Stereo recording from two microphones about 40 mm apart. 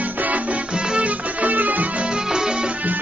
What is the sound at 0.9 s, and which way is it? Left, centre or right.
Music, right.